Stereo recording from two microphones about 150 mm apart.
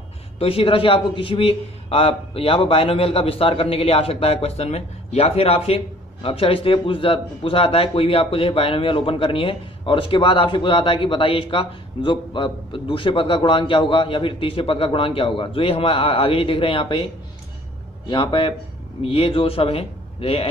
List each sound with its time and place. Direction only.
0.4 s speech: 40° left (ahead or behind)